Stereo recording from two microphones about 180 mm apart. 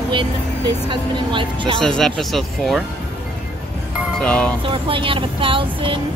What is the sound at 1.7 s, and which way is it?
Speech, 5° left (ahead or behind).